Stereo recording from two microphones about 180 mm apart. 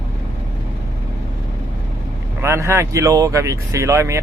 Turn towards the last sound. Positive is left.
turn(degrees=-15)  # may be behind; listen again after turning